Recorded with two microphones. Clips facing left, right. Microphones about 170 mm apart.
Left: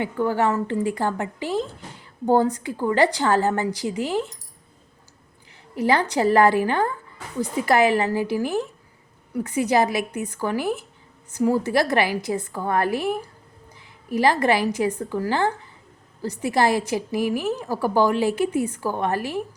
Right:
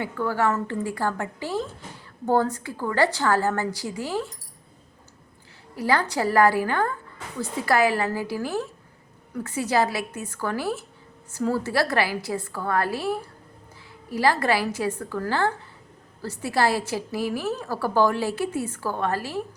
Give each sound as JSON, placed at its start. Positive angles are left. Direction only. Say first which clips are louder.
{"t": 0.0, "sound": "a woman's voice", "louder": "left 3 dB", "side_deg": 20}
{"t": 5.7, "sound": "a woman's voice", "louder": "left 3 dB", "side_deg": 20}